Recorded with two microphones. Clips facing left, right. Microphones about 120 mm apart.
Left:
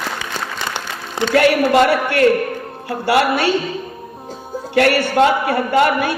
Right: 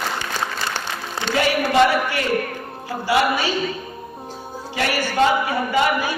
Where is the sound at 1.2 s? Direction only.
60° left (ahead or behind).